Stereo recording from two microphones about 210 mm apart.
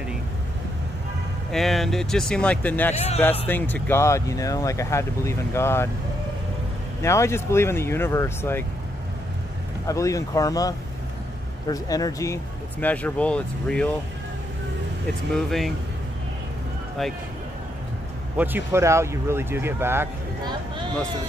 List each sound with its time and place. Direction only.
1.5 s speech: centre (ahead or behind)
2.9 s speech: 30° left (ahead or behind)
3.4 s speech: 10° left (ahead or behind)
7.0 s speech: 15° left (ahead or behind)
9.8 s speech: 15° left (ahead or behind)
15.3 s speech: centre (ahead or behind)
17.0 s speech: centre (ahead or behind)
18.4 s speech: 10° right (ahead or behind)